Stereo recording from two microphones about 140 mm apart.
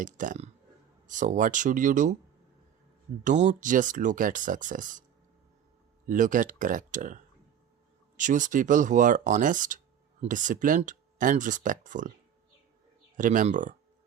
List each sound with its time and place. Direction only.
0.0 s speech: 70° right (ahead or behind)
3.2 s speech: 55° right (ahead or behind)
6.1 s speech: 70° right (ahead or behind)
13.1 s speech: 70° right (ahead or behind)